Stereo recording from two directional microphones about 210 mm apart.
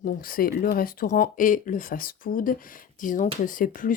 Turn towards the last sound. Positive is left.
turn(degrees=40)  # may be behind; listen again after turning